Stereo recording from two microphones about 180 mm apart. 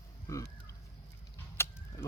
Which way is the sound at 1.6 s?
15° left (ahead or behind).